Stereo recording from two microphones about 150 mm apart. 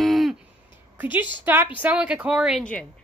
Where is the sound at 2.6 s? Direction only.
5° left (ahead or behind).